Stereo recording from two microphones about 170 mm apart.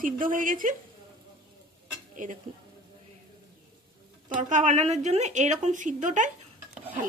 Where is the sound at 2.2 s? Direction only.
50° right (ahead or behind).